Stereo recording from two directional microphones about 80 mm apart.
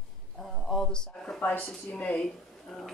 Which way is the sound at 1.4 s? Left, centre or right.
Centre.